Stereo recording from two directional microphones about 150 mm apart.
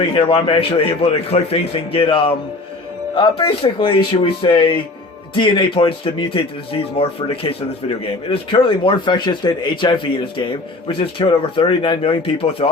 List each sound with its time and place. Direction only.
0.1 s a man's voice: 35° left (ahead or behind)